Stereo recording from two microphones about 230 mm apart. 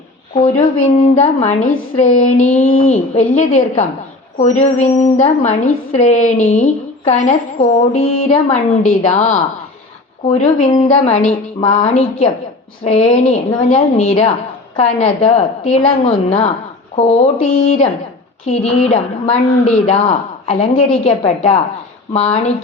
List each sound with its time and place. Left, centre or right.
1.1 s a woman's voice: left
10.7 s a woman's voice: left